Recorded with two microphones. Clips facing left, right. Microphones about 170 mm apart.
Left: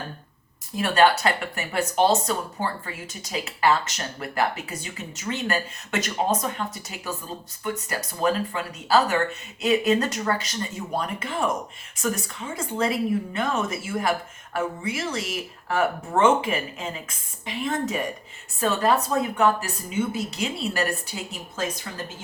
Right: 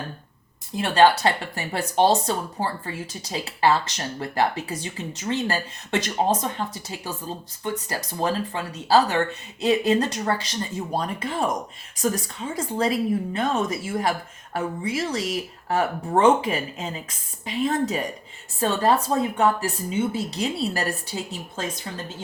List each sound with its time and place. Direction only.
0.8 s speech: 30° right (ahead or behind)